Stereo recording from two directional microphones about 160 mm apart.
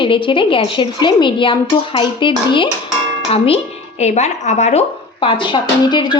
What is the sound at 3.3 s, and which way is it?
A woman's voice, 35° left (ahead or behind).